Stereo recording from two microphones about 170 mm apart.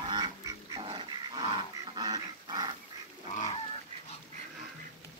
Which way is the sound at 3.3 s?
40° left (ahead or behind).